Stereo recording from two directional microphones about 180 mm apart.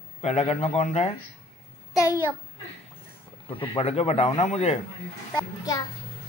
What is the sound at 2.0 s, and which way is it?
Speech, 15° right (ahead or behind).